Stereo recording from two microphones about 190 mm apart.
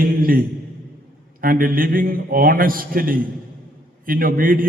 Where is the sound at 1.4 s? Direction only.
50° right (ahead or behind).